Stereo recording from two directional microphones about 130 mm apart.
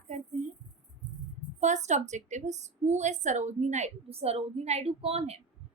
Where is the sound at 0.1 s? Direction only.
70° right (ahead or behind).